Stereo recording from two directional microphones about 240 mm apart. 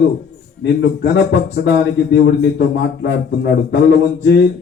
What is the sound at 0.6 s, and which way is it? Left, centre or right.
A man's voice, left.